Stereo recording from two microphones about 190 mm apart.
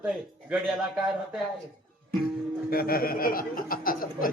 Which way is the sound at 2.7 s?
50° left (ahead or behind).